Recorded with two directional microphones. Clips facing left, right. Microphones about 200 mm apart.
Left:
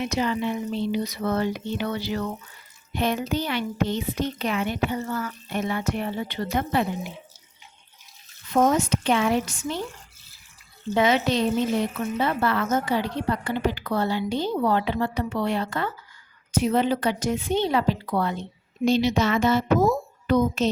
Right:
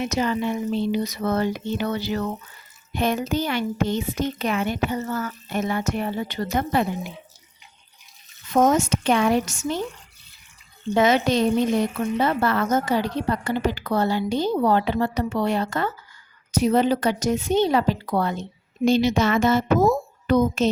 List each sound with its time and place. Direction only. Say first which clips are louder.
0.0 s speech: right 2 dB; 45° right (ahead or behind)
8.5 s speech: right 2 dB; 45° right (ahead or behind)
10.9 s speech: right 2 dB; 45° right (ahead or behind)